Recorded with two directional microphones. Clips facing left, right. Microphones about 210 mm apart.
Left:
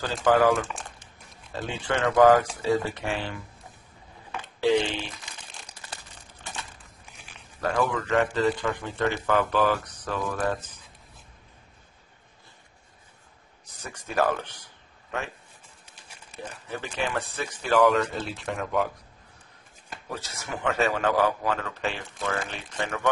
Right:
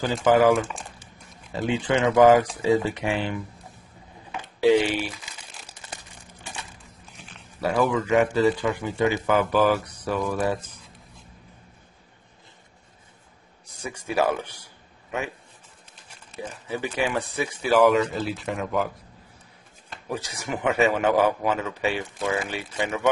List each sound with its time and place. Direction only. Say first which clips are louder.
0.0 s a man's voice: right 3 dB; 15° right (ahead or behind)
4.6 s crumpling: right 4 dB; 10° right (ahead or behind)
7.6 s a man's voice: right 4 dB; 5° right (ahead or behind)
9.6 s speech: right 3 dB; centre (ahead or behind)
13.7 s a man's voice: right 6 dB; 10° right (ahead or behind)
16.6 s a man's voice: right 5 dB; 10° right (ahead or behind)
20.1 s a man's voice: right 5 dB; 15° right (ahead or behind)